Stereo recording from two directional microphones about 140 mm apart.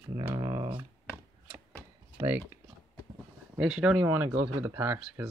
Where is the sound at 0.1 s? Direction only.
25° right (ahead or behind).